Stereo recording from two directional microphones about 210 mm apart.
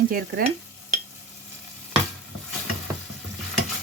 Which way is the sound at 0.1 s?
45° right (ahead or behind).